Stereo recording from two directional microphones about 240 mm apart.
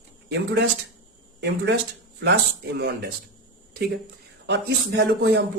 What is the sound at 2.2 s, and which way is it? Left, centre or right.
Speech, right.